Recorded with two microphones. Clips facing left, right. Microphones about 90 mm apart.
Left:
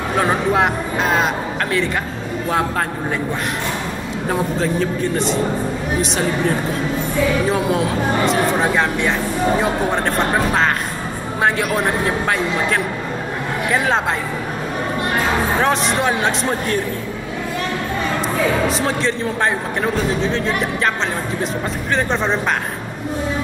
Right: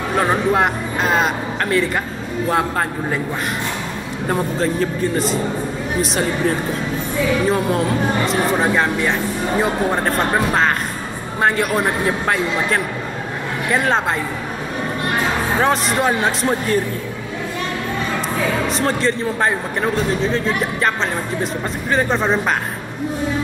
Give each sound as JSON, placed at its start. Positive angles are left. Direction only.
{"t": 0.2, "sound": "a man's voice", "side_deg": 0}
{"t": 4.3, "sound": "a man's voice", "side_deg": 0}
{"t": 15.6, "sound": "a man's voice", "side_deg": 0}
{"t": 18.7, "sound": "a man's voice", "side_deg": 0}
{"t": 21.9, "sound": "a man's voice", "side_deg": -5}